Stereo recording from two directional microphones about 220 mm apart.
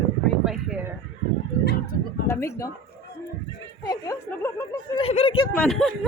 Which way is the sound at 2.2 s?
10° left (ahead or behind).